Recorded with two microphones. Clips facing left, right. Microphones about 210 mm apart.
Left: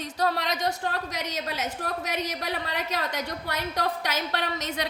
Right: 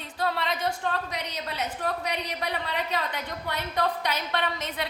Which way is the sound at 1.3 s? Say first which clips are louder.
Left 1 dB; 90° left.